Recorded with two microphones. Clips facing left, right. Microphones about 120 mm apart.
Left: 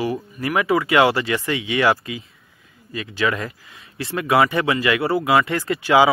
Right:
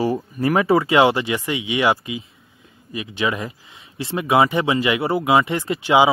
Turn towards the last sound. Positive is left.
turn(degrees=-20)  # may be behind; listen again after turning